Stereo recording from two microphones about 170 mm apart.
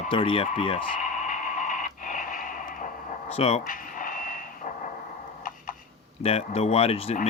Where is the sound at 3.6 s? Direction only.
55° left (ahead or behind).